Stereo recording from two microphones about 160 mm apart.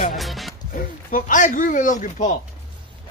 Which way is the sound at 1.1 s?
55° left (ahead or behind).